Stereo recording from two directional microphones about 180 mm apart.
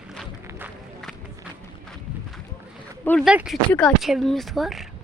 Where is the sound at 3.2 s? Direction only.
5° right (ahead or behind).